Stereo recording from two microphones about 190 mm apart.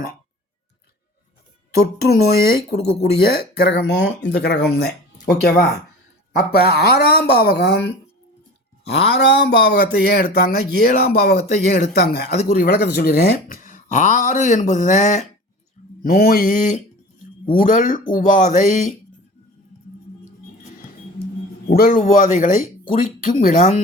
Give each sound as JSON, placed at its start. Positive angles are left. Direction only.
{"t": 2.0, "sound": "speech", "side_deg": 55}
{"t": 5.2, "sound": "speech", "side_deg": 45}
{"t": 16.0, "sound": "speech", "side_deg": 50}
{"t": 21.7, "sound": "speech", "side_deg": 50}